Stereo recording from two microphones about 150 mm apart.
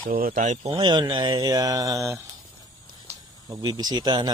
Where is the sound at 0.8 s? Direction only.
30° right (ahead or behind).